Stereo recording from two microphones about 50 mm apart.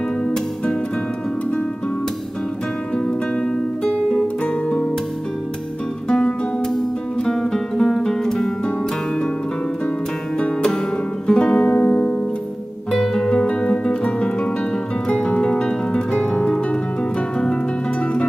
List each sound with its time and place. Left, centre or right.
6.0 s music: centre
11.2 s music: centre